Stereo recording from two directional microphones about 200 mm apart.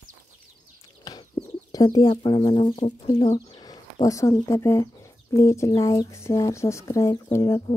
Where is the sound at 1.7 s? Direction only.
20° left (ahead or behind).